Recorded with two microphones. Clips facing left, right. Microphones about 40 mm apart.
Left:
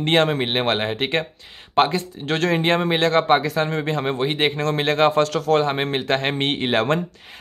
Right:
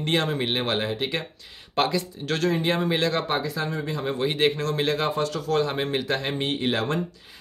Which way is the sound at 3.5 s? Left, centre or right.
Left.